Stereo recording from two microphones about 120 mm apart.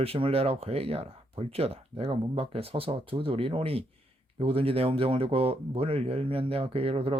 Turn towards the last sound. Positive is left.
turn(degrees=-55)  # may be behind; listen again after turning